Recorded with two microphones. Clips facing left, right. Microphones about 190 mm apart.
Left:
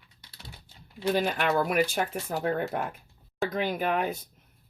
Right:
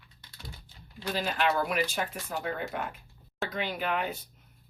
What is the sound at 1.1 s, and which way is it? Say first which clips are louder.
Speech: left 2 dB; 50° left (ahead or behind).